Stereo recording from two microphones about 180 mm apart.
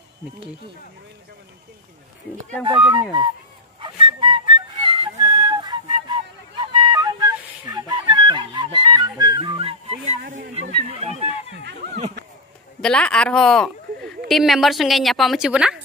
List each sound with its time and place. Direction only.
2.6 s speech: 25° right (ahead or behind)
3.8 s music: 25° right (ahead or behind)
6.8 s flute: 20° right (ahead or behind)
8.7 s music: 20° right (ahead or behind)
10.2 s speech: 45° right (ahead or behind)
11.6 s speech: 65° right (ahead or behind)
12.8 s a woman's voice: 5° left (ahead or behind)